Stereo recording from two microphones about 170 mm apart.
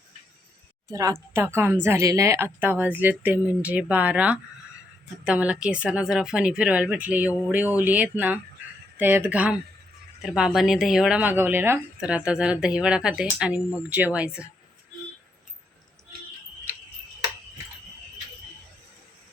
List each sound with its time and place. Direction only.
0.9 s a woman's voice: 20° right (ahead or behind)